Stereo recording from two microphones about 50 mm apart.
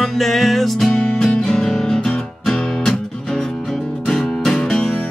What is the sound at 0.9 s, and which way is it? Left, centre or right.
Music, centre.